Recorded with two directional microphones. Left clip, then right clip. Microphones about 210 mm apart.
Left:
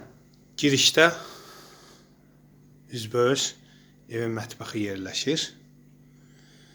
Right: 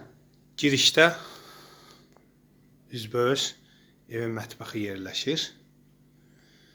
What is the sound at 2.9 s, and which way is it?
Speech, centre (ahead or behind).